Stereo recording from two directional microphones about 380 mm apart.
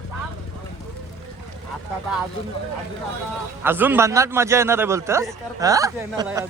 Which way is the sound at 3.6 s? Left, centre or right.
Centre.